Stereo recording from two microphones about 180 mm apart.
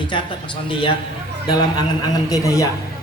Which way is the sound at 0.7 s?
25° left (ahead or behind).